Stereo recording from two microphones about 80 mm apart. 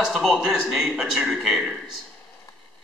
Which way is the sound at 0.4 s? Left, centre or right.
Centre.